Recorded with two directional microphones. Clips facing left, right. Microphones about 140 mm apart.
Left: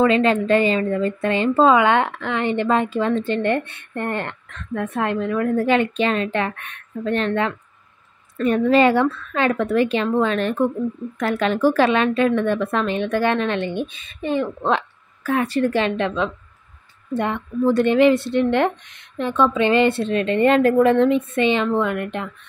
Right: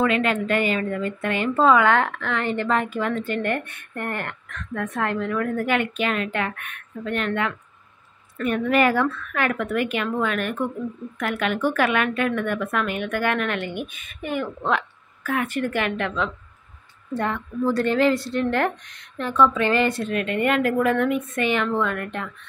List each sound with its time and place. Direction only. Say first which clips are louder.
0.0 s a woman's voice: left 5 dB; 30° left (ahead or behind)